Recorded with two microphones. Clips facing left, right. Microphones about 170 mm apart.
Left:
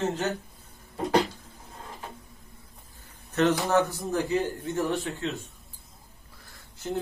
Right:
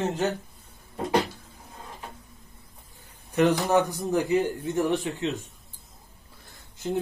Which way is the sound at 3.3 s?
15° right (ahead or behind).